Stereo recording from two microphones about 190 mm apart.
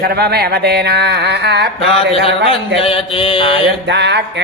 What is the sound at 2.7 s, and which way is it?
Speech, 30° left (ahead or behind).